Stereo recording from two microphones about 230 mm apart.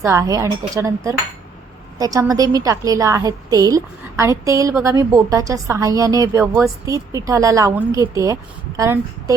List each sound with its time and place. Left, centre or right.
0.0 s a woman's voice: centre